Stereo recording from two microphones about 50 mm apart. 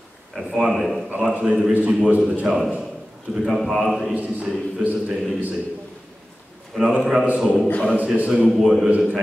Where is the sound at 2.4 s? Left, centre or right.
Centre.